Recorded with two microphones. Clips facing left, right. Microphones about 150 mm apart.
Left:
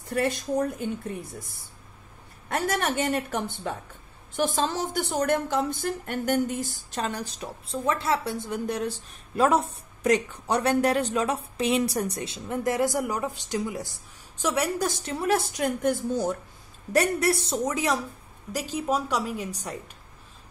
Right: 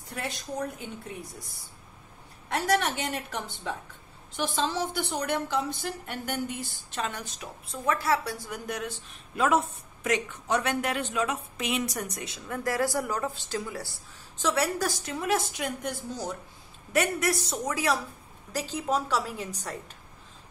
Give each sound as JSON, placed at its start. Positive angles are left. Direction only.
{"t": 3.0, "sound": "a woman's voice", "side_deg": 45}
{"t": 16.9, "sound": "a woman's voice", "side_deg": 35}
{"t": 18.5, "sound": "a woman's voice", "side_deg": 10}